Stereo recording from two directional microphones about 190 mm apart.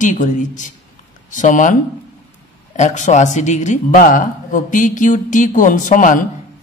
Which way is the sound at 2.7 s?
40° left (ahead or behind).